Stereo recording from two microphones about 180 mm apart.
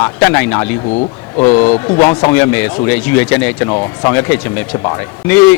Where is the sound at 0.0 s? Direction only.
15° left (ahead or behind).